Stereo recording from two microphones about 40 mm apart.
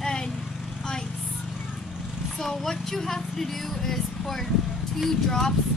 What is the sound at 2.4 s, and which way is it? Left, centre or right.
Speech, centre.